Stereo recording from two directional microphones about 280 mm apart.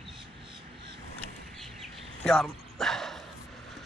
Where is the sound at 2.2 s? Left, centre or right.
Centre.